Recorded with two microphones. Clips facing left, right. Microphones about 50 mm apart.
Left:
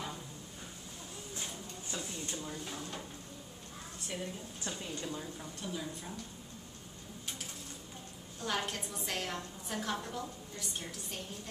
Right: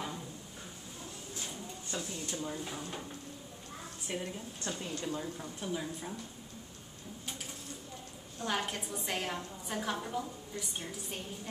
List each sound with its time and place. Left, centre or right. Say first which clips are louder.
1.5 s a sound: right 2 dB; centre
2.3 s a woman's voice: right 3 dB; centre
4.1 s a woman's voice: right 2 dB; centre
4.6 s a woman's voice: right 3 dB; centre
8.4 s a woman's voice: right 1 dB; centre